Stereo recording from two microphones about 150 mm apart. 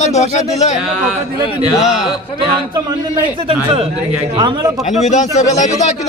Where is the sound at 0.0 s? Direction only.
50° left (ahead or behind).